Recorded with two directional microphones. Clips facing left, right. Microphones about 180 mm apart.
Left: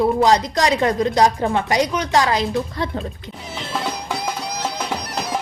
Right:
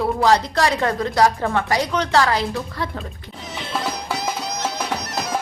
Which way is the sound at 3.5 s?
5° left (ahead or behind).